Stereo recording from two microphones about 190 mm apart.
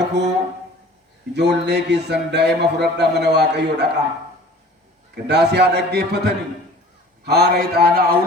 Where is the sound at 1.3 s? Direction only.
65° right (ahead or behind).